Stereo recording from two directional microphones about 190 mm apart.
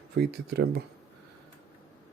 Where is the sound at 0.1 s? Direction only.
60° right (ahead or behind).